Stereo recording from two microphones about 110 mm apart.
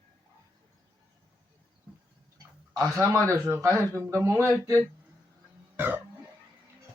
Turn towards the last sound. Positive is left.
turn(degrees=-15)  # may be behind; listen again after turning